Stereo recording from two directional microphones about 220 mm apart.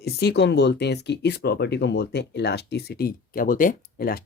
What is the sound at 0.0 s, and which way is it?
Speech, 45° left (ahead or behind).